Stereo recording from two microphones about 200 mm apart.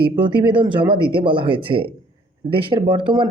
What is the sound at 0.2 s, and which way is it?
Speech, 25° right (ahead or behind).